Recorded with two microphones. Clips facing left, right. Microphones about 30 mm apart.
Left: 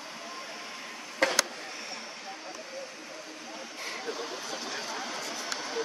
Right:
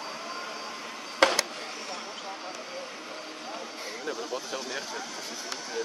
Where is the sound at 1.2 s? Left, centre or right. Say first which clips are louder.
Right 5 dB; right.